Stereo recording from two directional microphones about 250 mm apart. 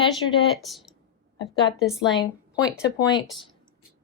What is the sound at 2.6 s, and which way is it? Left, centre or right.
Speech, centre.